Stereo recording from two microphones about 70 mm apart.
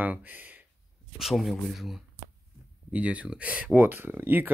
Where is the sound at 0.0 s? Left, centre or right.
Right.